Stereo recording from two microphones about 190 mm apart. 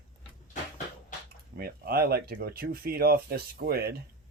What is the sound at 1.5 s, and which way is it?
Speech, 55° right (ahead or behind).